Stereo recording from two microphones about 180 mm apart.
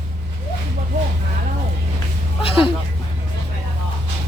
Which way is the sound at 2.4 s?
30° left (ahead or behind).